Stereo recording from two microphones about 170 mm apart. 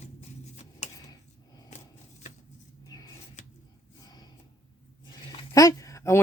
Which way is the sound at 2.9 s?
20° left (ahead or behind).